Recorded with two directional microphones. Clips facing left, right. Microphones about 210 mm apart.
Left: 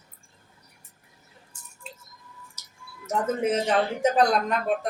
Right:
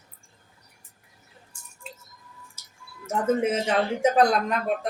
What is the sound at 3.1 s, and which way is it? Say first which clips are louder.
Speech: right 1 dB; 5° right (ahead or behind).